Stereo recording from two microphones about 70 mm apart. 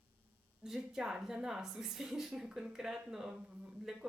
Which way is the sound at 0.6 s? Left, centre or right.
Centre.